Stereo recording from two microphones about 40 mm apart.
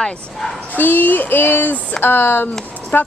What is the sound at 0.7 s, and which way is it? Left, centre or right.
Speech, left.